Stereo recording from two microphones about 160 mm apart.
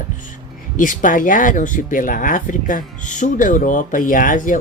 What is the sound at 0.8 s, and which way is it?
Speech, 55° left (ahead or behind).